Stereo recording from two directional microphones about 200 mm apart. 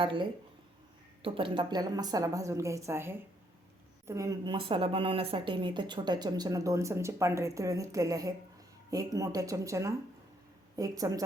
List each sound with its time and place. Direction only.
0.0 s a woman's voice: 25° right (ahead or behind)